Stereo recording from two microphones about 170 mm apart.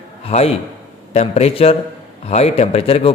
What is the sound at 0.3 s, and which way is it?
A man's voice, 35° left (ahead or behind).